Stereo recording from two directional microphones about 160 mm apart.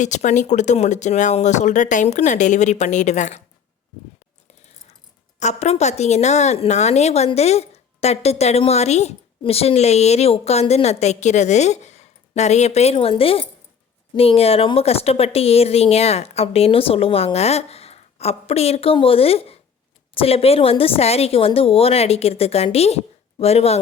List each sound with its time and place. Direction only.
0.0 s a woman's voice: 50° left (ahead or behind)
5.4 s a woman's voice: 45° left (ahead or behind)